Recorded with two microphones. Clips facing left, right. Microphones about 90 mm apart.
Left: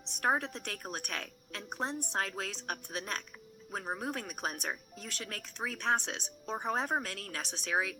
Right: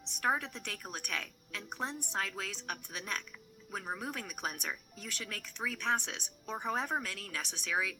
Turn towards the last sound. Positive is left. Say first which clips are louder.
# left 2 dB
turn(degrees=30)  # may be behind; listen again after turning